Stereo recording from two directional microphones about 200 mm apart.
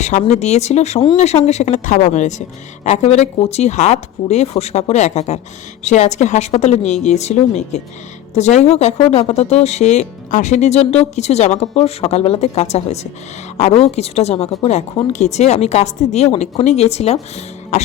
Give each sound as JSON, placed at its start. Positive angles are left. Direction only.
{"t": 0.0, "sound": "speech", "side_deg": 35}